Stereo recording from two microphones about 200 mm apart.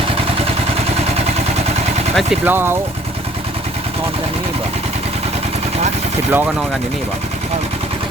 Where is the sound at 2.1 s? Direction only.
5° right (ahead or behind).